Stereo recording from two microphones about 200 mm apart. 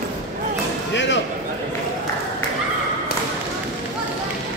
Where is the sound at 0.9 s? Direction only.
65° left (ahead or behind).